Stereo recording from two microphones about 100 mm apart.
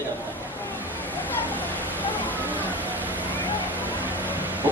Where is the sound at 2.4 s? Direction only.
20° right (ahead or behind).